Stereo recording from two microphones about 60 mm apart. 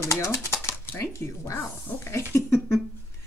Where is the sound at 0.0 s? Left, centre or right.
Left.